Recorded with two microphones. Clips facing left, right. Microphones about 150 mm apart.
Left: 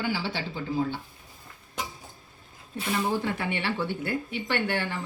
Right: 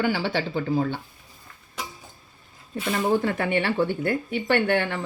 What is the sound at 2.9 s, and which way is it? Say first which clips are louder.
Speech: right 5 dB; 55° right (ahead or behind).